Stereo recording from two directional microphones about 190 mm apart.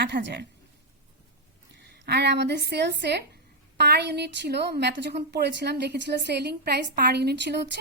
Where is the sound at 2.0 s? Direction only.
60° right (ahead or behind).